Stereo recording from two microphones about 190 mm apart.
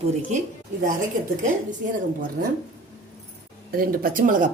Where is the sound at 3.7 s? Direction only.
50° right (ahead or behind).